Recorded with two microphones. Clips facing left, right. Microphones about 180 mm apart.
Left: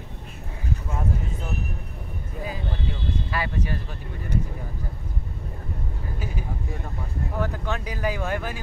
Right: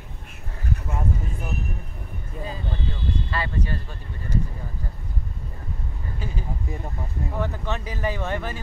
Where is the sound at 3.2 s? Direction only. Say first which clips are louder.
Left 2 dB; 10° left (ahead or behind).